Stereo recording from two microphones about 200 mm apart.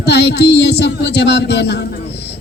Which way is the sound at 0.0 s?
55° left (ahead or behind).